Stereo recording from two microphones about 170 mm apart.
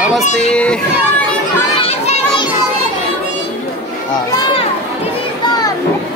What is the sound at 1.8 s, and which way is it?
Children playing, 40° left (ahead or behind).